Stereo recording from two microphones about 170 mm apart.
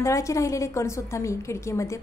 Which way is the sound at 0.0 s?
20° left (ahead or behind).